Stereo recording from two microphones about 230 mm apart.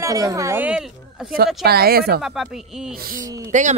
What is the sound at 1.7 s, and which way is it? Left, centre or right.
Speech, right.